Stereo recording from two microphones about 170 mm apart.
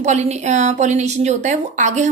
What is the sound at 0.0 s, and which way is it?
A woman's voice, 40° right (ahead or behind).